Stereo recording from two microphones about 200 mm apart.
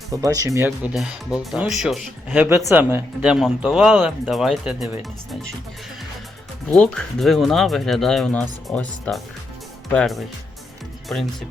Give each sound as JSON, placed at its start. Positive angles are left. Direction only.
{"t": 0.1, "sound": "speech", "side_deg": -15}
{"t": 0.9, "sound": "speech", "side_deg": -5}
{"t": 6.7, "sound": "speech", "side_deg": 5}